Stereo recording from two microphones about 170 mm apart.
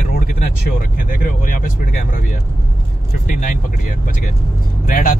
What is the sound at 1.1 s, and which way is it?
Speech, 55° left (ahead or behind).